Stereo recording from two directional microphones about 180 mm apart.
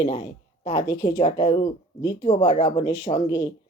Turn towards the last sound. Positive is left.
turn(degrees=25)  # may be behind; listen again after turning